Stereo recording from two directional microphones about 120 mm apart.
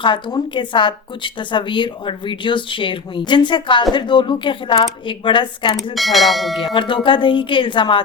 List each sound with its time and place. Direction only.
0.0 s a woman's voice: 40° left (ahead or behind)
5.9 s speech: centre (ahead or behind)
6.7 s a woman's voice: 45° left (ahead or behind)